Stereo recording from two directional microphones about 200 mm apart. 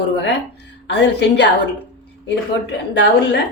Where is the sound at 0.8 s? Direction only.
60° left (ahead or behind).